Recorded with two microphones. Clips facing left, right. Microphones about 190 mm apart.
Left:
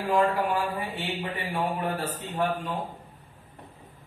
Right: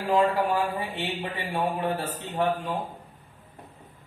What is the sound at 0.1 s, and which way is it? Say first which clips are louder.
A man's voice: right 2 dB; 25° right (ahead or behind).